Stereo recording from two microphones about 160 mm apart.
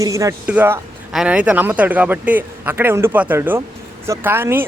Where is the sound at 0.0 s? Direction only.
20° right (ahead or behind).